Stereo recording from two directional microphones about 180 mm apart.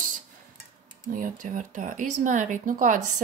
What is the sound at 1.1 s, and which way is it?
Speech, 45° right (ahead or behind).